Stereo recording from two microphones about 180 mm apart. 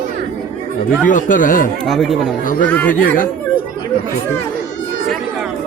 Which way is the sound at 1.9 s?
Centre (ahead or behind).